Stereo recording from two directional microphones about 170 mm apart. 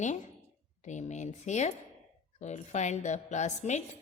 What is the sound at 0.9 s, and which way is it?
A woman's voice, 45° left (ahead or behind).